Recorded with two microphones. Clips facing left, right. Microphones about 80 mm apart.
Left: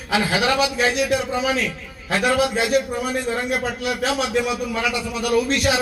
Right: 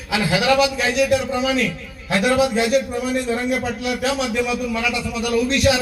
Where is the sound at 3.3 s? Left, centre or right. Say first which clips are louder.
Right 2 dB; left.